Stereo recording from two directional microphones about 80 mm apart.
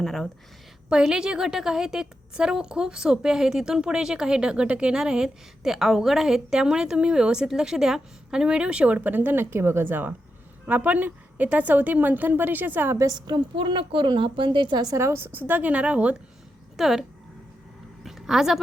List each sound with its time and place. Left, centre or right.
0.0 s a woman's voice: centre
0.9 s a woman's voice: centre
13.0 s a woman's voice: right
14.8 s a woman's voice: right
15.4 s a woman's voice: right
16.7 s speech: centre
18.0 s a sound: centre